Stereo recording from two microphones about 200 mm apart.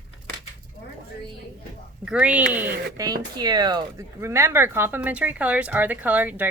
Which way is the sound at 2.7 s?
50° right (ahead or behind).